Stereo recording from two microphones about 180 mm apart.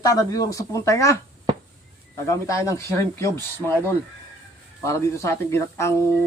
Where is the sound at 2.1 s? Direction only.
15° left (ahead or behind).